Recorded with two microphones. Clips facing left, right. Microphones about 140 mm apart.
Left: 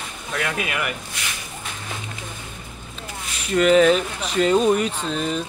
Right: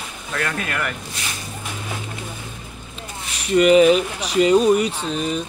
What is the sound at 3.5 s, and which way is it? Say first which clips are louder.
Speech: right 2 dB; 10° right (ahead or behind).